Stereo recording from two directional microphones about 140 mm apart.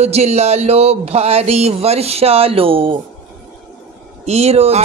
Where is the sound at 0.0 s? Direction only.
50° right (ahead or behind).